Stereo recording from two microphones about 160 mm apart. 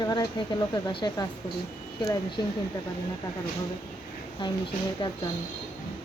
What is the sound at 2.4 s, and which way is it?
Speech, 25° left (ahead or behind).